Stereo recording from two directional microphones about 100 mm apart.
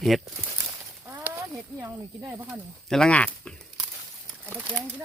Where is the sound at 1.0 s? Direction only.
30° right (ahead or behind).